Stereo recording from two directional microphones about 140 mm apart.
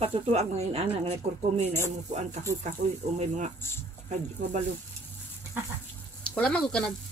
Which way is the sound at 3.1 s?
55° right (ahead or behind).